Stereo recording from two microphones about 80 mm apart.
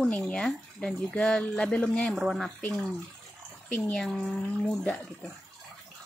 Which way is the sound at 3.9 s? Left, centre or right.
Centre.